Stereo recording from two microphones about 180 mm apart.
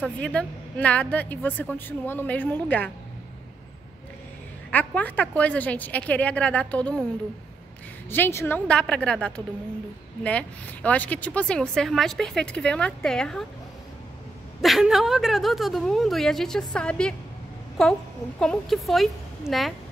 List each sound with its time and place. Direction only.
0.0 s a woman's voice: 5° left (ahead or behind)
4.6 s a woman's voice: 10° left (ahead or behind)
8.1 s speech: 15° left (ahead or behind)
14.6 s speech: centre (ahead or behind)